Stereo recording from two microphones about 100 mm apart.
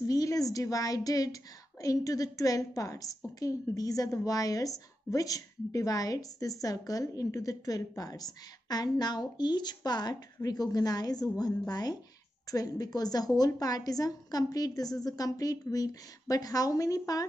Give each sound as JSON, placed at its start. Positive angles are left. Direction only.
{"t": 0.0, "sound": "a woman's voice", "side_deg": 35}